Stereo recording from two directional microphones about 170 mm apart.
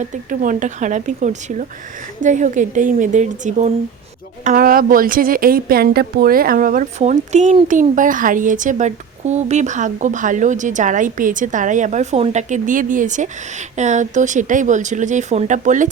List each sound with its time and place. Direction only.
0.0 s speech: 50° right (ahead or behind)
4.4 s speech: 55° right (ahead or behind)